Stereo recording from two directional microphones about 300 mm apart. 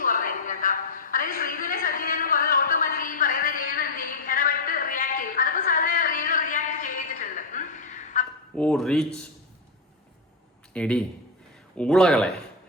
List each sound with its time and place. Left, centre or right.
0.0 s a sound: left
8.5 s speech: centre
10.8 s speech: centre